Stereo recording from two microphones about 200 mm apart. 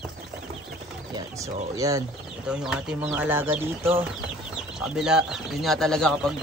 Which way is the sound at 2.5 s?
5° right (ahead or behind).